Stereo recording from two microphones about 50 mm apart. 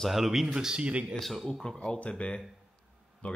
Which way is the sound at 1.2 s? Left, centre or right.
Centre.